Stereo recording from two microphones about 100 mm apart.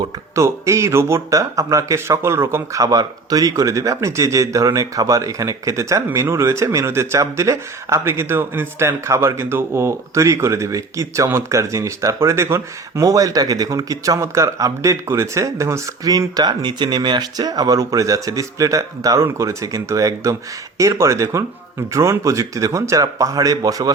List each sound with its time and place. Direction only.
0.3 s speech: 30° right (ahead or behind)